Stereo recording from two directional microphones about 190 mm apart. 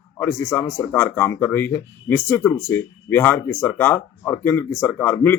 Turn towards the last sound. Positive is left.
turn(degrees=10)  # may be behind; listen again after turning